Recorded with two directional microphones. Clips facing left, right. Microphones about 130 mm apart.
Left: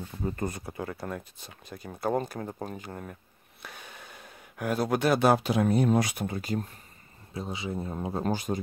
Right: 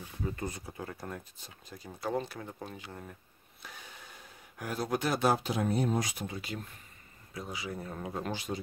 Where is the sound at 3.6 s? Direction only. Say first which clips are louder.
Left 4 dB; 65° left (ahead or behind); by 6.7 s 40° left (ahead or behind).